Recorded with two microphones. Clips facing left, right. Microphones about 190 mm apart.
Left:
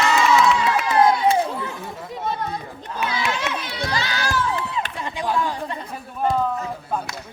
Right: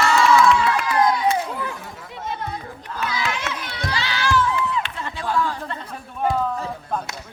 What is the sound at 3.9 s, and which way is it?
Crowd, 45° left (ahead or behind).